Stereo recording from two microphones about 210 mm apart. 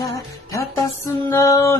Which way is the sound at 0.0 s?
15° left (ahead or behind).